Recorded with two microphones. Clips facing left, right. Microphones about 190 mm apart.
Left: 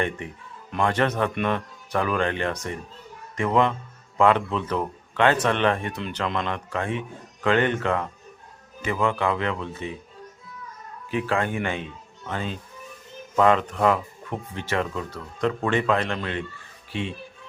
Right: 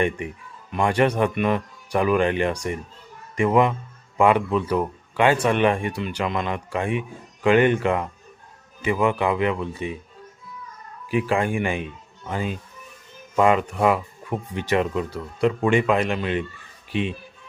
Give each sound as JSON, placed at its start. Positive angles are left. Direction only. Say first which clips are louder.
{"t": 0.8, "sound": "speech", "louder": "right 3 dB", "side_deg": -15}
{"t": 11.1, "sound": "speech", "louder": "right 3 dB", "side_deg": -10}